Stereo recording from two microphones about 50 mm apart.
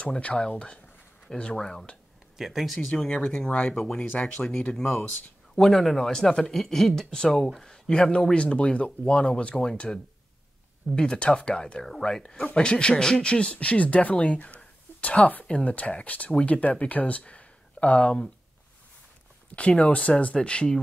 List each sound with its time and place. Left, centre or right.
0.0 s speech: left
2.3 s speech: centre
2.9 s speech: centre
4.4 s speech: centre
11.0 s speech: centre
19.8 s speech: left